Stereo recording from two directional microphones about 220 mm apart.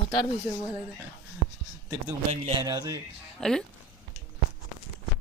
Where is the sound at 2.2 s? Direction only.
30° right (ahead or behind).